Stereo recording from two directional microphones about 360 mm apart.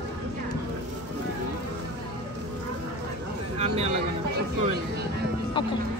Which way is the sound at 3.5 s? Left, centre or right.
Centre.